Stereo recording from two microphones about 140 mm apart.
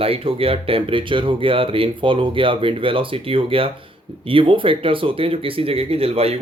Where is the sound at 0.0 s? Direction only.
40° right (ahead or behind).